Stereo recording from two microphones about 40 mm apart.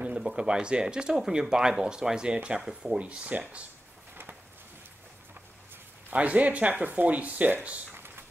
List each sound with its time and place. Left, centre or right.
0.4 s speech: right
3.0 s speech: right
6.0 s speech: right
7.9 s a sound: right